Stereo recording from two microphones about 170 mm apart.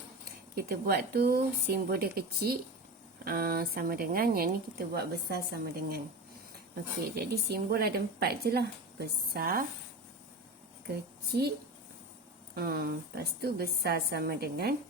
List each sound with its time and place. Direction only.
0.5 s speech: 65° right (ahead or behind)
4.9 s a woman's voice: 70° right (ahead or behind)
7.2 s a woman's voice: 70° right (ahead or behind)
11.3 s a woman's voice: 70° right (ahead or behind)
12.5 s a woman's voice: 65° right (ahead or behind)